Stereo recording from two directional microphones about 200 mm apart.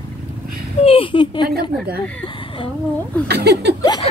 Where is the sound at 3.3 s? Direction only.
55° right (ahead or behind).